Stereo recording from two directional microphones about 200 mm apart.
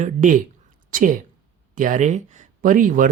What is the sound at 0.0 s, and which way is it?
A woman's voice, 40° right (ahead or behind).